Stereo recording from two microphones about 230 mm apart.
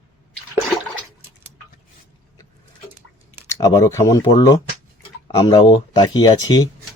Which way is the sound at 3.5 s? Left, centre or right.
Centre.